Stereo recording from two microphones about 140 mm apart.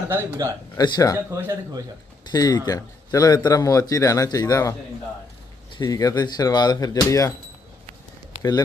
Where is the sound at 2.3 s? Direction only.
30° left (ahead or behind).